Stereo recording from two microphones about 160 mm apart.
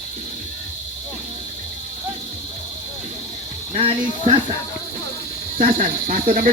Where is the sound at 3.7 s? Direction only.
35° right (ahead or behind).